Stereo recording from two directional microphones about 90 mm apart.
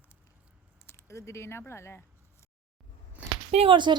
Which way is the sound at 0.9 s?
35° left (ahead or behind).